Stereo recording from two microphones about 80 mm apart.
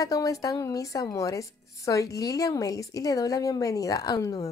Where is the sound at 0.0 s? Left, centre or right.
Left.